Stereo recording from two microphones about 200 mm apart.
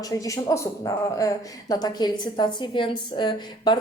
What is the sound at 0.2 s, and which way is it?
A woman's voice, 15° left (ahead or behind).